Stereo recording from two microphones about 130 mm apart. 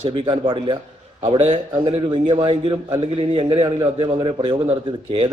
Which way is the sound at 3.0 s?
50° right (ahead or behind).